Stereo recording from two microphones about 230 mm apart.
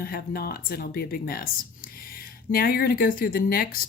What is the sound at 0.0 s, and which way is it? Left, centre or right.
Speech, left.